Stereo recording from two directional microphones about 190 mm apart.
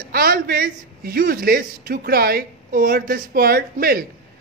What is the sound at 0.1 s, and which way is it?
Speech, 50° right (ahead or behind).